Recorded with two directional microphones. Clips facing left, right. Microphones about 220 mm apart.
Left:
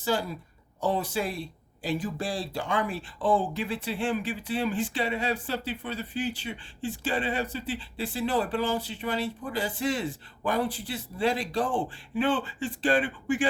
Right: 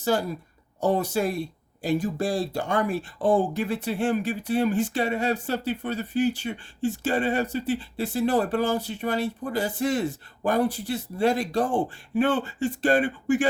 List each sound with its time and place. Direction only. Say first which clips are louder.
0.0 s speech: right 4 dB; 45° right (ahead or behind)